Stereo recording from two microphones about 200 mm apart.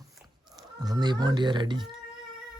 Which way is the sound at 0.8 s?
20° right (ahead or behind).